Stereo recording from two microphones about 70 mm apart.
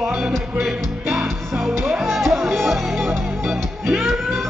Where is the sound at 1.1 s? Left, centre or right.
Centre.